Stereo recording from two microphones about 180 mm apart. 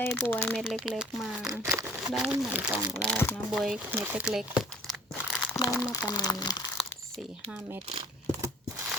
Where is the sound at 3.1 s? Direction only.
5° left (ahead or behind).